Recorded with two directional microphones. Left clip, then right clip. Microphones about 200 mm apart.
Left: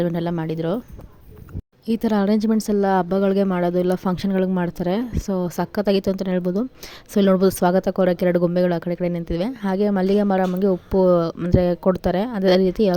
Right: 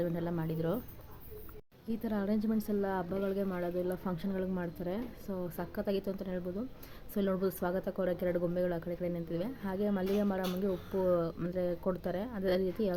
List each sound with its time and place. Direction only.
0.0 s speech: 45° left (ahead or behind)
1.9 s speech: 50° left (ahead or behind)